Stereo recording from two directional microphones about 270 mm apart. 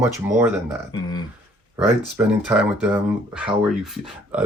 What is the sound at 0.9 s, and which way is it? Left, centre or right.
Speech, centre.